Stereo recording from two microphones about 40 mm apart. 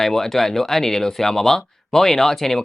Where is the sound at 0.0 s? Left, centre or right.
Centre.